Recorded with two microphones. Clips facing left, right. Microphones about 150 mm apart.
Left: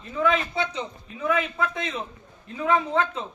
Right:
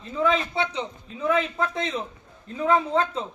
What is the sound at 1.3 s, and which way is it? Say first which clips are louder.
A man's voice: right 1 dB; 30° right (ahead or behind).